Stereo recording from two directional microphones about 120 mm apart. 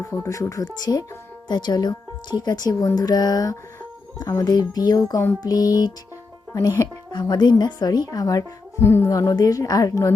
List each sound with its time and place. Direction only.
0.0 s speech: 25° left (ahead or behind)